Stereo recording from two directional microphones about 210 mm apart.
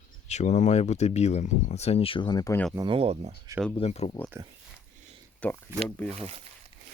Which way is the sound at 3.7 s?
30° left (ahead or behind).